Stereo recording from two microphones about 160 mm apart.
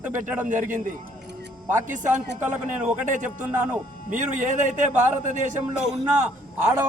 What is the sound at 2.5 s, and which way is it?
A man's voice, 50° right (ahead or behind).